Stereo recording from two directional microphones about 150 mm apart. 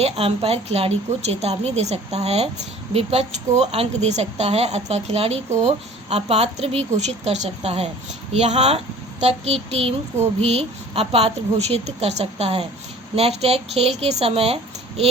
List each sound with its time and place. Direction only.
0.0 s a child's voice: 40° right (ahead or behind)